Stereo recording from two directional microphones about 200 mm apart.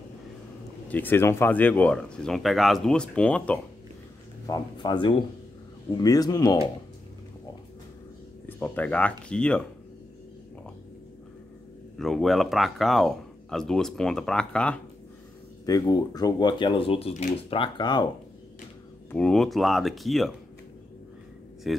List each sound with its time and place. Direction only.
0.8 s speech: 10° left (ahead or behind)
4.5 s speech: 20° left (ahead or behind)
8.5 s speech: 10° left (ahead or behind)
12.0 s speech: centre (ahead or behind)
15.6 s speech: 20° left (ahead or behind)
19.0 s speech: 5° left (ahead or behind)
21.7 s speech: centre (ahead or behind)